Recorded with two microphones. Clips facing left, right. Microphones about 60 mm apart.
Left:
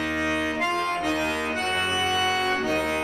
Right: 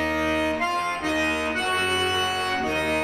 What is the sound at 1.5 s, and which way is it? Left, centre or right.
Organ, right.